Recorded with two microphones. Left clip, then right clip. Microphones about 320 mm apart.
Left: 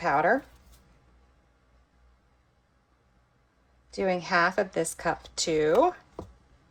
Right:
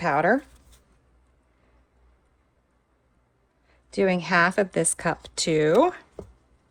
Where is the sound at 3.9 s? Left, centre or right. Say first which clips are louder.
Right 4 dB; right.